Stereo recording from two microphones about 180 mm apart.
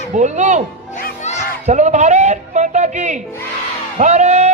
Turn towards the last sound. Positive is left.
turn(degrees=-40)  # may be behind; listen again after turning